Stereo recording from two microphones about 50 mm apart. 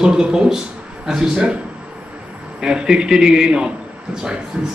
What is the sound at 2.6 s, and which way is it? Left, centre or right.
A man's voice, centre.